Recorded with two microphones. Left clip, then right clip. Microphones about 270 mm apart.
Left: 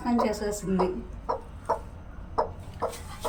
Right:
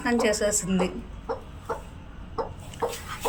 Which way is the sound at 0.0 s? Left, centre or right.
Centre.